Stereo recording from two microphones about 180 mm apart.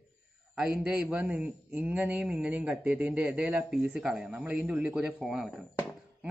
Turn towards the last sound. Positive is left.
turn(degrees=-5)  # may be behind; listen again after turning